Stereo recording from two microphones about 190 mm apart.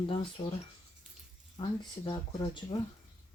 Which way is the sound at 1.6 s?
20° left (ahead or behind).